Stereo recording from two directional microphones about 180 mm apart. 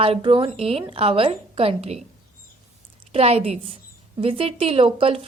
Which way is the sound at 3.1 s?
35° right (ahead or behind).